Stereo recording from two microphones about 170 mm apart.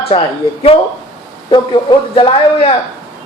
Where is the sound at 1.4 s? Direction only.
25° left (ahead or behind).